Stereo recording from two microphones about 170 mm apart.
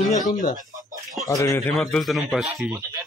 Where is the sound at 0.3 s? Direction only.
50° left (ahead or behind).